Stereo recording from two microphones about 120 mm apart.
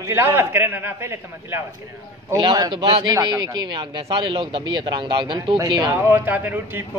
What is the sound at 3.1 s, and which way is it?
Speech, 30° right (ahead or behind).